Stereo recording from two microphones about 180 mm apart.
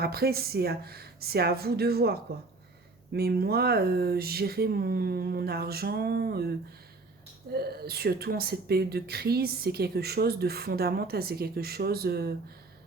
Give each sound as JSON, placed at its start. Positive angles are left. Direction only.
{"t": 0.0, "sound": "speech", "side_deg": -60}
{"t": 7.5, "sound": "speech", "side_deg": -60}